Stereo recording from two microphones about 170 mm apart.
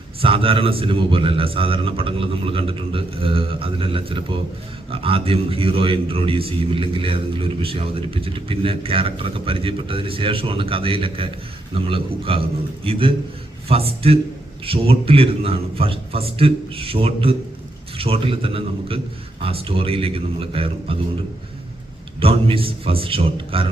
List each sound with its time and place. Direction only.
0.2 s a man's voice: 35° right (ahead or behind)
22.2 s a man's voice: 35° right (ahead or behind)